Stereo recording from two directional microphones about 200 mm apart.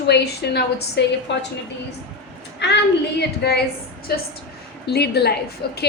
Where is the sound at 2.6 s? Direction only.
60° left (ahead or behind).